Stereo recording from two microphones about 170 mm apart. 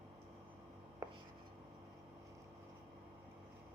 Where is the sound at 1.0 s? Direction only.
15° right (ahead or behind).